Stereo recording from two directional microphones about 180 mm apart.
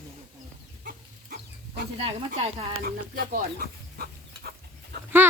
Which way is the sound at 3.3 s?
55° right (ahead or behind).